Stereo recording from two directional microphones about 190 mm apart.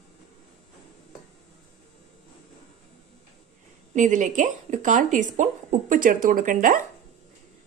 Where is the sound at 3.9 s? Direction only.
40° right (ahead or behind).